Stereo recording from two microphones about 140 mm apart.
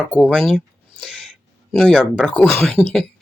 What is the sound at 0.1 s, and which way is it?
Speech, 10° left (ahead or behind).